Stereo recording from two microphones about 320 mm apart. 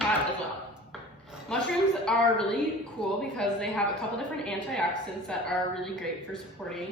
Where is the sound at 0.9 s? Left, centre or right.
Centre.